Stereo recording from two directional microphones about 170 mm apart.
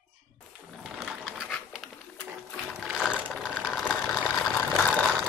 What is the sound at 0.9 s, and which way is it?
Bird, centre (ahead or behind).